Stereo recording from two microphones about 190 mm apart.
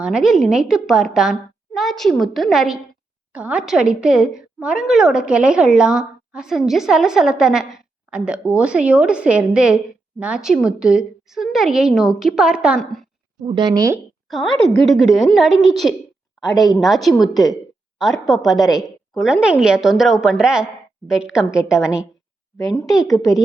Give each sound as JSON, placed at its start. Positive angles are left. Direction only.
{"t": 0.0, "sound": "a woman's voice", "side_deg": -5}
{"t": 13.4, "sound": "speech", "side_deg": -25}
{"t": 14.3, "sound": "a woman's voice", "side_deg": 0}
{"t": 22.5, "sound": "a woman's voice", "side_deg": 20}